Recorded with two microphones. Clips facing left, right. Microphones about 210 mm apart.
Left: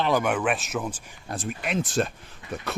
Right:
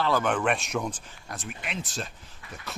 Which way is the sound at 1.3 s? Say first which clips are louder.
Left 8 dB; 40° left (ahead or behind).